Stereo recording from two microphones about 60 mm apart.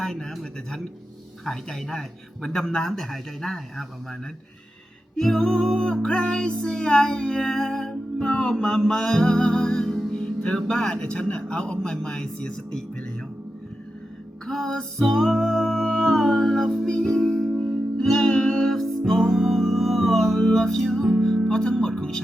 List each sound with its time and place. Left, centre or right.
0.0 s music: centre
5.1 s music: centre
14.4 s music: centre
21.0 s music: right
21.5 s music: centre